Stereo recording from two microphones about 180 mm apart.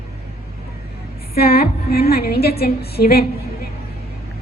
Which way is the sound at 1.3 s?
60° left (ahead or behind).